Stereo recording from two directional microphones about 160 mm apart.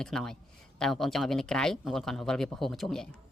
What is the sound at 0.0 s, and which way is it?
Speech, 5° left (ahead or behind).